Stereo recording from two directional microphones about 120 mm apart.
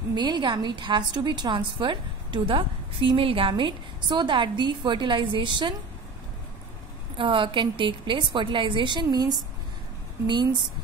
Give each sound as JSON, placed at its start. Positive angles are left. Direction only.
{"t": 0.1, "sound": "a woman's voice", "side_deg": -40}
{"t": 7.2, "sound": "a woman's voice", "side_deg": -45}